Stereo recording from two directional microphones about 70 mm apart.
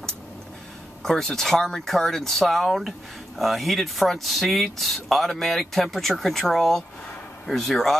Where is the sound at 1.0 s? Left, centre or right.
Centre.